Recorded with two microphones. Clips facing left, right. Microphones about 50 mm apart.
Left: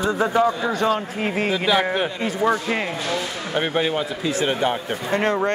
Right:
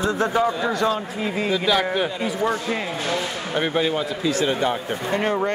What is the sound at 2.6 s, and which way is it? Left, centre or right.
Speech, left.